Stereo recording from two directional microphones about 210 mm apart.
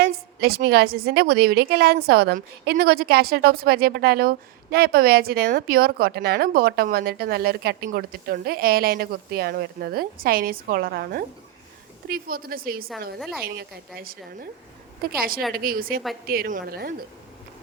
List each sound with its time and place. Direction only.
0.0 s a woman's voice: 45° right (ahead or behind)
13.1 s a woman's voice: centre (ahead or behind)
13.4 s a woman's voice: 45° right (ahead or behind)
15.5 s a woman's voice: 45° right (ahead or behind)